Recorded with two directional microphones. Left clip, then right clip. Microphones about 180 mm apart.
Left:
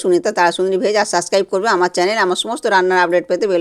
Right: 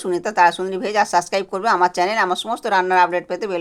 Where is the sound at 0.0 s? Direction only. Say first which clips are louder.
Left 2 dB; 25° left (ahead or behind).